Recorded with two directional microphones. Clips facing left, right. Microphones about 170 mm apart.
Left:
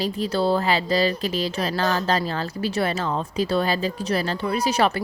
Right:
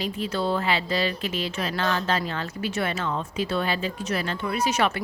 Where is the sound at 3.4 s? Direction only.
35° left (ahead or behind).